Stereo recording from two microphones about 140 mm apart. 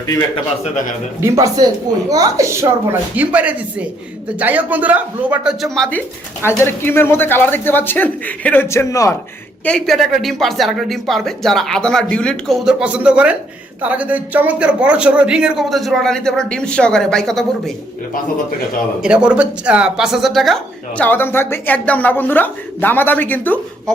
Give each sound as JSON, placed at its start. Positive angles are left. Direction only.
{"t": 1.2, "sound": "a woman's voice", "side_deg": -25}
{"t": 3.2, "sound": "speech", "side_deg": -10}
{"t": 6.6, "sound": "speech", "side_deg": 15}
{"t": 9.6, "sound": "a man's voice", "side_deg": 5}
{"t": 12.6, "sound": "a man's voice", "side_deg": -10}
{"t": 19.0, "sound": "a man's voice", "side_deg": -5}
{"t": 21.0, "sound": "speech", "side_deg": 15}